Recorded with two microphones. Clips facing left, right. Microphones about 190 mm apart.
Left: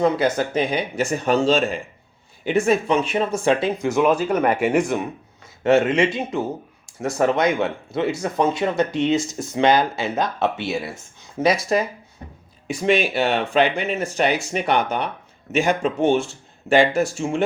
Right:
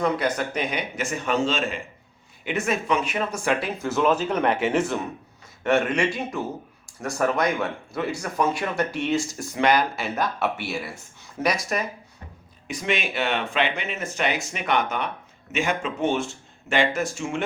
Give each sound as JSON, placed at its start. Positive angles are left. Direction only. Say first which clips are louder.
{"t": 0.0, "sound": "speech", "louder": "left 5 dB", "side_deg": 30}
{"t": 5.6, "sound": "speech", "louder": "left 5 dB", "side_deg": 25}